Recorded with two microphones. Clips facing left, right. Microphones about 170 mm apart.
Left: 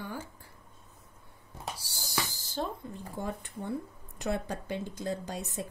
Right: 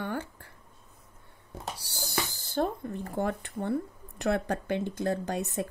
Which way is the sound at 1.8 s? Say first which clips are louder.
Right 3 dB; 65° right (ahead or behind).